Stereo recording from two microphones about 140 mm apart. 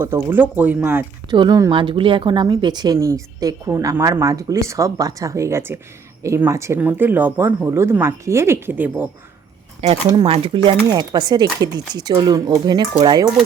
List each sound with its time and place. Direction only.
0.0 s speech: 15° right (ahead or behind)
1.3 s speech: 30° right (ahead or behind); by 9.0 s 10° right (ahead or behind)
10.2 s speech: 40° right (ahead or behind)